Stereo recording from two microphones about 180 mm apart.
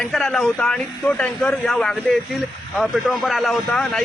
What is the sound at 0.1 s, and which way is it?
Speech, centre (ahead or behind).